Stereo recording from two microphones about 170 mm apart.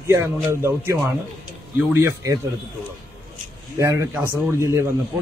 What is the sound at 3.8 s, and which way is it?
A man's voice, 15° right (ahead or behind).